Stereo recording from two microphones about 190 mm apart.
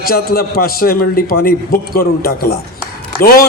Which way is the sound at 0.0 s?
50° left (ahead or behind).